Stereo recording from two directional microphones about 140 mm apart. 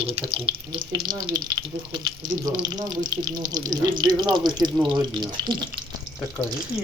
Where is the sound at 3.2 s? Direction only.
25° right (ahead or behind).